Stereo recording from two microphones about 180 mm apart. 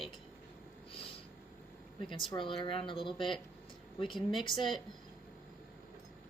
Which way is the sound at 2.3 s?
30° left (ahead or behind).